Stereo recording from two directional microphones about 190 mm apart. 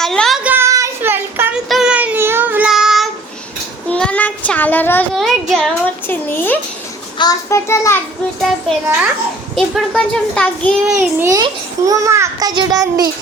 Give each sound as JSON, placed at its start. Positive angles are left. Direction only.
{"t": 0.0, "sound": "a sound", "side_deg": 0}
{"t": 0.4, "sound": "child singing", "side_deg": -10}
{"t": 5.1, "sound": "a child's voice", "side_deg": 0}
{"t": 9.6, "sound": "a child's voice", "side_deg": 0}
{"t": 10.9, "sound": "a child's voice", "side_deg": -15}